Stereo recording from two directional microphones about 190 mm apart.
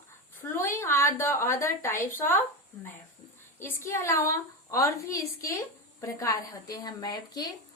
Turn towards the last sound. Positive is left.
turn(degrees=20)  # may be behind; listen again after turning